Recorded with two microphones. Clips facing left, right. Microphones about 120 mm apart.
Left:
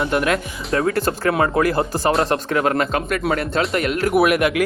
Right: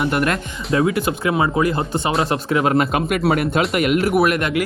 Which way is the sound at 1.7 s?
Centre (ahead or behind).